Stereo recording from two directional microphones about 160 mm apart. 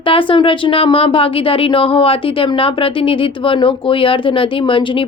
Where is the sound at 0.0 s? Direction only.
35° left (ahead or behind).